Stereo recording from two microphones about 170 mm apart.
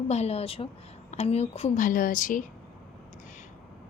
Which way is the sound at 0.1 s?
40° left (ahead or behind).